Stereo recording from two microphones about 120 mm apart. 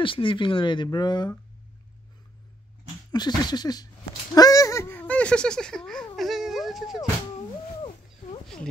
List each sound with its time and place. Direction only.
0.0 s speech: 45° left (ahead or behind)
3.1 s speech: 35° left (ahead or behind)
4.4 s a sound: 30° left (ahead or behind); by 7.1 s centre (ahead or behind)